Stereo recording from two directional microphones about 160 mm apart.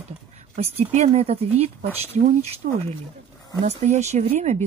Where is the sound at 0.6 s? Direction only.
40° right (ahead or behind).